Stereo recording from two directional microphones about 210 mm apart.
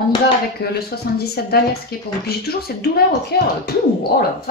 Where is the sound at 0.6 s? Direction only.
50° left (ahead or behind).